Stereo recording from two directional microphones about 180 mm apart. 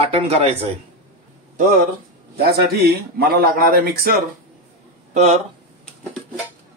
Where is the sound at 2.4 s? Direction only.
60° right (ahead or behind).